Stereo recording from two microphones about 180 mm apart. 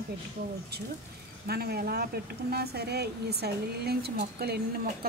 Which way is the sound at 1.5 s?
60° right (ahead or behind).